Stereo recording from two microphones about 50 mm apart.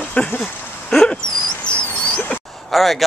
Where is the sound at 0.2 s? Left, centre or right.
Left.